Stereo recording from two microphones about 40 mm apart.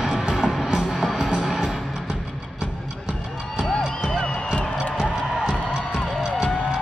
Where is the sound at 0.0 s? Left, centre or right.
Centre.